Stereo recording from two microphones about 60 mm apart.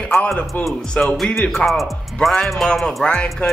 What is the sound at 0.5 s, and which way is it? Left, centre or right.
Speech, left.